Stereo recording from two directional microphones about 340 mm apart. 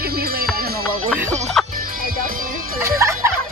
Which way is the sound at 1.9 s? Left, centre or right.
Right.